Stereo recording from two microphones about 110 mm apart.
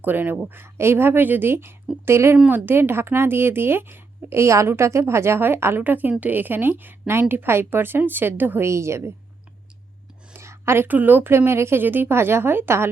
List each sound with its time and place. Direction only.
0.0 s a woman's voice: 15° right (ahead or behind)
2.4 s speech: 10° right (ahead or behind)
2.6 s a woman's voice: 20° right (ahead or behind)
10.3 s a woman's voice: 25° right (ahead or behind)